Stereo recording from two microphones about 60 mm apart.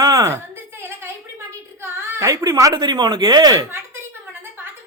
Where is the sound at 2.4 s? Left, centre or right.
Right.